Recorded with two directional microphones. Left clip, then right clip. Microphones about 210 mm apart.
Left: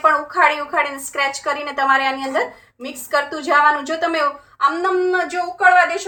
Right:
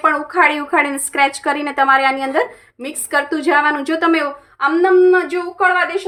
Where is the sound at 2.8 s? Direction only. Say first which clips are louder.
Right 2 dB; 55° right (ahead or behind).